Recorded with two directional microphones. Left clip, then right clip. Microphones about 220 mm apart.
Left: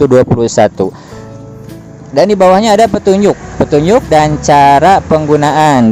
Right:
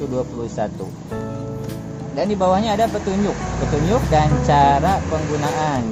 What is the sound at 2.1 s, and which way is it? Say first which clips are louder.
Speech: left 12 dB; 40° left (ahead or behind).